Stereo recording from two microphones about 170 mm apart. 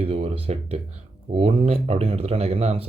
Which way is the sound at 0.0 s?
35° right (ahead or behind).